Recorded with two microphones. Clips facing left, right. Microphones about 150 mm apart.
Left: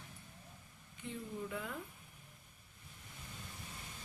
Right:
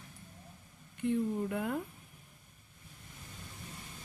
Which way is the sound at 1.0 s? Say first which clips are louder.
Right 12 dB; 55° right (ahead or behind).